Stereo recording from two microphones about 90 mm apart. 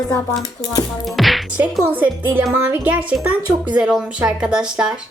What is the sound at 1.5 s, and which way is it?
Speech, 15° right (ahead or behind).